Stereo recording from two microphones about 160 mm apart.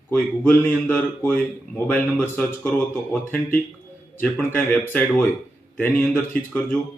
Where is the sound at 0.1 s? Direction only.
10° left (ahead or behind).